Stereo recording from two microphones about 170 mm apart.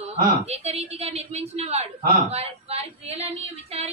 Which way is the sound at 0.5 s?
35° right (ahead or behind).